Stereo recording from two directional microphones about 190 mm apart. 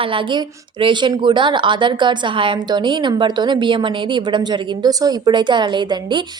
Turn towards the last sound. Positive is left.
turn(degrees=-25)  # may be behind; listen again after turning